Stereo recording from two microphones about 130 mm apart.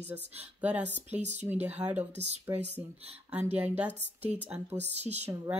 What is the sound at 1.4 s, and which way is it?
Speech, 20° right (ahead or behind).